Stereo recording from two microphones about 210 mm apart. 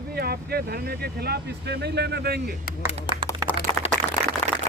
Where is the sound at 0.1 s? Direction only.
50° right (ahead or behind).